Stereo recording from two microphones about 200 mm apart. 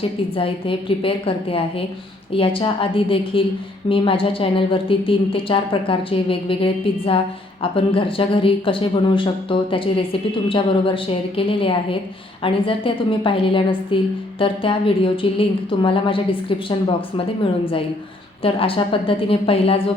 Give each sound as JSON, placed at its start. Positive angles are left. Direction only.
{"t": 0.3, "sound": "a woman's voice", "side_deg": 25}
{"t": 18.4, "sound": "a woman's voice", "side_deg": 25}